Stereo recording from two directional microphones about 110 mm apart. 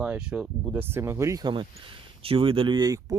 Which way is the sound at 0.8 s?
20° right (ahead or behind).